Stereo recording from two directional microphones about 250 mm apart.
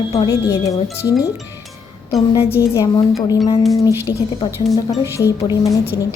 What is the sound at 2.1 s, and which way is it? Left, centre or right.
Speech, centre.